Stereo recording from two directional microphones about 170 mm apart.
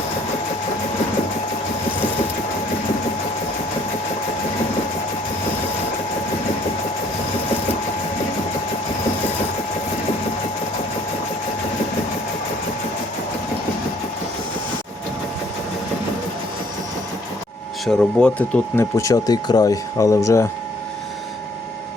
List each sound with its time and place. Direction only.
17.8 s speech: 5° left (ahead or behind)